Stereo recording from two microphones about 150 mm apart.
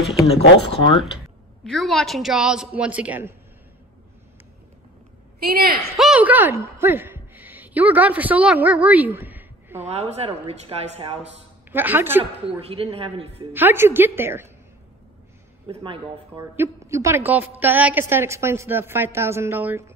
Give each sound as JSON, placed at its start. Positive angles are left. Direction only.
{"t": 0.3, "sound": "speech", "side_deg": 35}
{"t": 1.1, "sound": "speech", "side_deg": 0}
{"t": 5.5, "sound": "a woman's voice", "side_deg": -90}
{"t": 5.9, "sound": "a woman's voice", "side_deg": -5}
{"t": 9.8, "sound": "speech", "side_deg": -45}
{"t": 11.7, "sound": "a woman's voice", "side_deg": -15}
{"t": 12.2, "sound": "a man's voice", "side_deg": -40}
{"t": 13.5, "sound": "a woman's voice", "side_deg": -15}
{"t": 15.7, "sound": "a man's voice", "side_deg": -35}
{"t": 16.3, "sound": "a woman's voice", "side_deg": -20}